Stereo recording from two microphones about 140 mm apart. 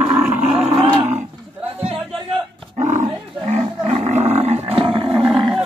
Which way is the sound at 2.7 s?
60° right (ahead or behind).